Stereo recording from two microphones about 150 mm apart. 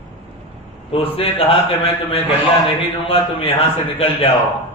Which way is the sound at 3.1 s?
40° left (ahead or behind).